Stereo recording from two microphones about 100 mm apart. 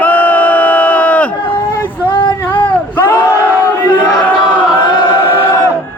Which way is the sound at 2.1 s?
55° left (ahead or behind).